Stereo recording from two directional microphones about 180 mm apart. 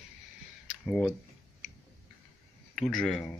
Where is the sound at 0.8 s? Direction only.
5° left (ahead or behind).